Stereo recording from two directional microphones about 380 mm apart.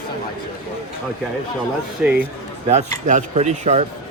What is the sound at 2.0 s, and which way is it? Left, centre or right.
Speech, centre.